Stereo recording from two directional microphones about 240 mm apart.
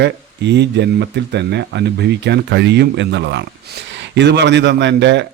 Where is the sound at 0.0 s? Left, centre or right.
Right.